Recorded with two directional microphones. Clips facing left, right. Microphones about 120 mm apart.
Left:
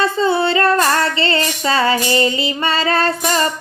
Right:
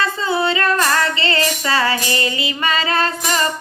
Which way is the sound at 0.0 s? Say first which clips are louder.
Left 3 dB; 30° left (ahead or behind).